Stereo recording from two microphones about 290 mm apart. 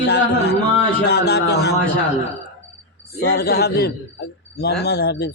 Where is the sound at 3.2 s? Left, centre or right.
Left.